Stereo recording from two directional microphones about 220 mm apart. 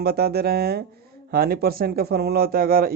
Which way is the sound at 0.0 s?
45° right (ahead or behind).